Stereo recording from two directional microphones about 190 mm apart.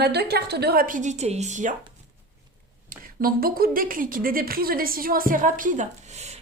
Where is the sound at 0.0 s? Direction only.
60° right (ahead or behind); by 1.7 s 40° right (ahead or behind).